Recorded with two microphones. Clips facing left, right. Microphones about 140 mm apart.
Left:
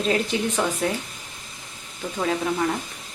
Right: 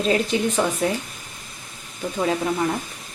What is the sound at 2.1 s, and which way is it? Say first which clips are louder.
Speech: right 2 dB; 15° right (ahead or behind).